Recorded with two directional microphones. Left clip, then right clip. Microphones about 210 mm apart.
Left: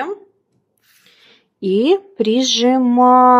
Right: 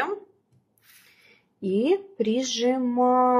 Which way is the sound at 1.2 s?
55° left (ahead or behind).